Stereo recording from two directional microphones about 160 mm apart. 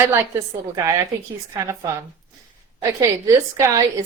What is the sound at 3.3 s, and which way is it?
Speech, 15° right (ahead or behind).